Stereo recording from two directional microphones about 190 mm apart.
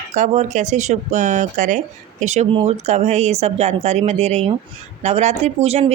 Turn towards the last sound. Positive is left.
turn(degrees=-35)  # may be behind; listen again after turning